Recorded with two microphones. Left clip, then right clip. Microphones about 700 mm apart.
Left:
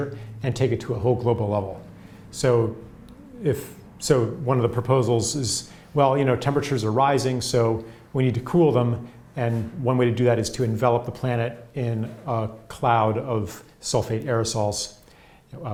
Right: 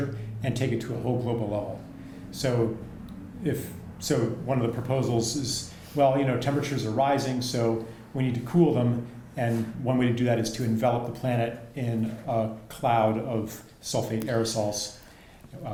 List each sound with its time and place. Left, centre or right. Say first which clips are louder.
0.4 s speech: left 5 dB; left